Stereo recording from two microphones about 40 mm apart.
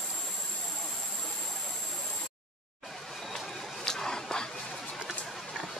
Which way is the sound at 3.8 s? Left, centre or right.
Centre.